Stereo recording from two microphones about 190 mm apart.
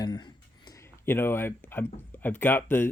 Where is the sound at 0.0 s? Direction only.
20° left (ahead or behind).